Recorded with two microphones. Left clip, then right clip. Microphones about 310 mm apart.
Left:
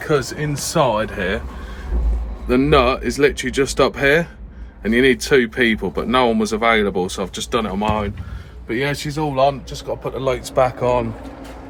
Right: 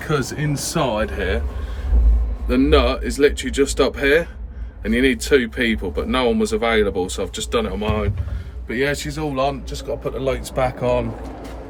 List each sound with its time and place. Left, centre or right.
0.0 s speech: centre
2.5 s speech: centre